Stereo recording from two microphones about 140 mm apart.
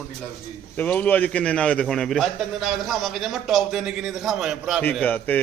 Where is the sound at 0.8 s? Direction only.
10° left (ahead or behind); by 4.8 s 5° right (ahead or behind).